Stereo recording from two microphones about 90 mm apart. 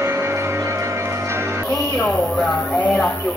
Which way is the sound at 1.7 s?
10° left (ahead or behind).